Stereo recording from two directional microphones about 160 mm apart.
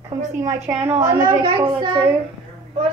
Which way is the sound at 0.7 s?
15° right (ahead or behind).